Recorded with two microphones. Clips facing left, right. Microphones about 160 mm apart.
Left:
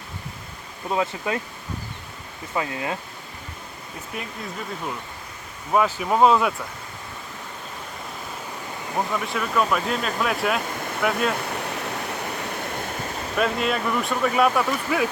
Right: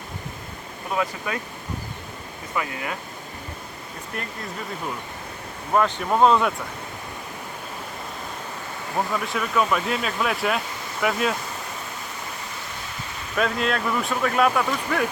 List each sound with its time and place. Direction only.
0.9 s speech: 25° left (ahead or behind)
2.5 s speech: 25° left (ahead or behind)
4.1 s speech: 5° left (ahead or behind)
5.7 s speech: 5° left (ahead or behind)
9.0 s speech: centre (ahead or behind)
13.3 s speech: 5° left (ahead or behind)